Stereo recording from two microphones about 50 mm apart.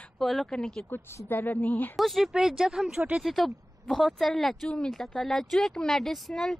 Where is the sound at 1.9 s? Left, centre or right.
Centre.